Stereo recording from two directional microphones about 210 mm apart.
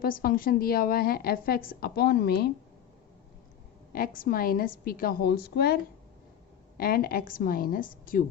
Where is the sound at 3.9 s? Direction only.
45° left (ahead or behind).